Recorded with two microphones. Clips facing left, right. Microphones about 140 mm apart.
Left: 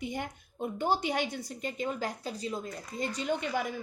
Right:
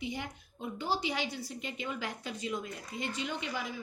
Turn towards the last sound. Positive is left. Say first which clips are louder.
# left 6 dB
turn(degrees=50)  # may be behind; listen again after turning